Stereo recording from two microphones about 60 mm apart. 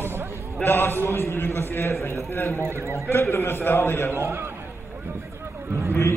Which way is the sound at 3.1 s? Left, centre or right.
Left.